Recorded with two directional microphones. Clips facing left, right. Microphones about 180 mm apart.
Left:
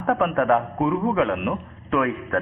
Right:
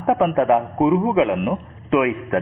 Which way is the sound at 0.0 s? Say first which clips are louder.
Right 4 dB; 15° right (ahead or behind).